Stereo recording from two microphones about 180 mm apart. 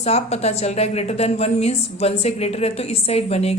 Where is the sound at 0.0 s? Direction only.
35° left (ahead or behind).